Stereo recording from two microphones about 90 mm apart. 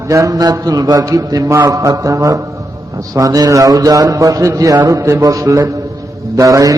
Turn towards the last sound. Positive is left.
turn(degrees=-40)  # may be behind; listen again after turning